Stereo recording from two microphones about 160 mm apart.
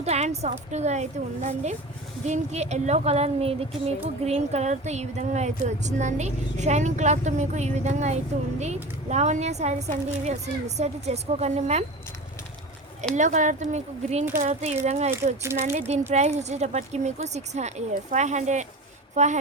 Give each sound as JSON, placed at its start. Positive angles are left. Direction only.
{"t": 0.0, "sound": "speech", "side_deg": -40}
{"t": 13.1, "sound": "speech", "side_deg": -50}